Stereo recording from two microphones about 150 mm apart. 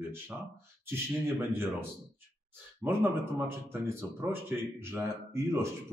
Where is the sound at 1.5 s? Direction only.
15° right (ahead or behind).